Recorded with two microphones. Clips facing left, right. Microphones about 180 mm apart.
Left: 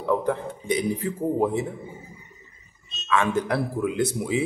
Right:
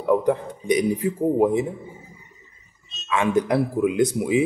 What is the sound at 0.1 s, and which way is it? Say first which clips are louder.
A man's voice: right 4 dB; 15° right (ahead or behind).